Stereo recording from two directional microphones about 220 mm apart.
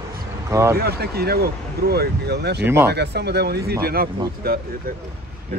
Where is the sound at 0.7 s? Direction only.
45° right (ahead or behind).